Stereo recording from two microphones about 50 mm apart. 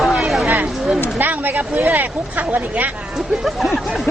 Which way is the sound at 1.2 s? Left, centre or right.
Right.